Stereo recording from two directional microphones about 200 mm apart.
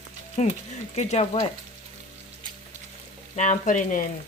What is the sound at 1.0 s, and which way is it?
Speech, 30° left (ahead or behind).